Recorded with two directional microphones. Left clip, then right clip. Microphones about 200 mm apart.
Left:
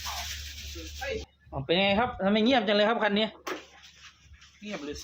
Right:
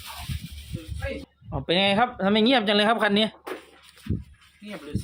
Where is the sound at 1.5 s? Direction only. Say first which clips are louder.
Right 3 dB; 45° right (ahead or behind).